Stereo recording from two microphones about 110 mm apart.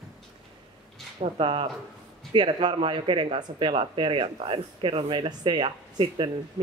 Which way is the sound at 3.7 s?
55° right (ahead or behind).